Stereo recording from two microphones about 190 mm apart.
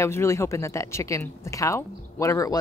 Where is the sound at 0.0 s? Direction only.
15° left (ahead or behind).